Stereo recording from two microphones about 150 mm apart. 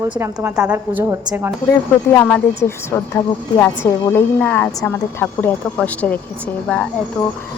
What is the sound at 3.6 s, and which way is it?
A woman's voice, 15° left (ahead or behind).